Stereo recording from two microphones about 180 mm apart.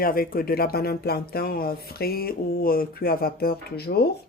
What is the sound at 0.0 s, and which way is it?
Speech, 50° left (ahead or behind).